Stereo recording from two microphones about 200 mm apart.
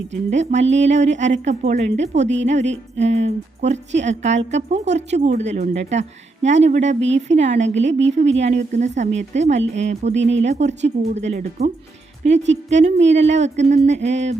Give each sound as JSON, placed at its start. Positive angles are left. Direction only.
{"t": 0.1, "sound": "a woman's voice", "side_deg": -35}
{"t": 12.7, "sound": "a woman's voice", "side_deg": -35}